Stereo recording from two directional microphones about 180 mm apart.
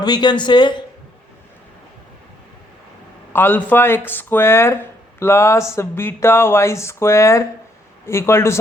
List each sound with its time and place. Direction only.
0.0 s speech: 25° left (ahead or behind)
3.3 s speech: 10° left (ahead or behind)